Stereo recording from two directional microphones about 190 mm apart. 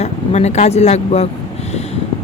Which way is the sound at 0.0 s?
35° left (ahead or behind).